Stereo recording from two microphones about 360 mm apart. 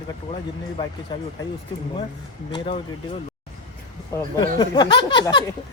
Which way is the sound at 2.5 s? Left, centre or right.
Centre.